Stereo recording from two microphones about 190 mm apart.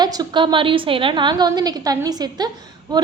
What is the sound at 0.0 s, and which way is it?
A woman's voice, 20° right (ahead or behind).